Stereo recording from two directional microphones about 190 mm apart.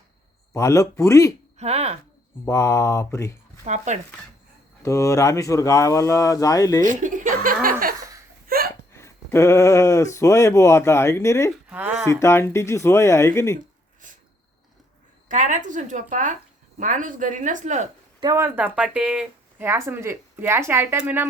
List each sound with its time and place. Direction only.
0.5 s speech: 15° left (ahead or behind)
1.5 s speech: 35° right (ahead or behind)
2.4 s speech: 15° left (ahead or behind)
3.6 s speech: 40° right (ahead or behind)
4.8 s speech: 15° left (ahead or behind)
6.8 s speech: 45° right (ahead or behind)
8.4 s hiccup: 50° right (ahead or behind)
8.9 s speech: 15° left (ahead or behind)
11.7 s speech: 10° right (ahead or behind)
12.0 s speech: 15° left (ahead or behind)
15.3 s speech: 40° right (ahead or behind)
18.2 s speech: 15° right (ahead or behind)